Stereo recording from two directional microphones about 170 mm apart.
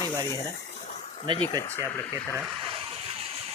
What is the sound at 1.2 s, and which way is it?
Speech, 30° right (ahead or behind).